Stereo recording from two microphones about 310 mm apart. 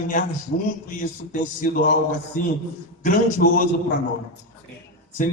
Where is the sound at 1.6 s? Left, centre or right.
Left.